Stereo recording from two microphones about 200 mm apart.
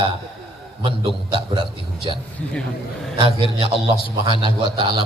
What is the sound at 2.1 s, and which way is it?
A man's voice, 25° right (ahead or behind).